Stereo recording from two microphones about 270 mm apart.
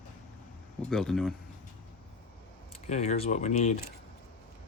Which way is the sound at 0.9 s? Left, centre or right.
Centre.